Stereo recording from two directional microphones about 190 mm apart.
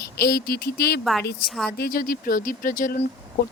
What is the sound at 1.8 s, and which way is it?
Speech, 50° left (ahead or behind).